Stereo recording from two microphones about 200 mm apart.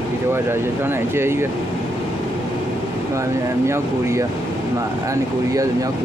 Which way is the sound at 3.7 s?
15° right (ahead or behind).